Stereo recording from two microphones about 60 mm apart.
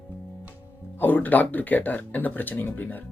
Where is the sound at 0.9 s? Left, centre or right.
Left.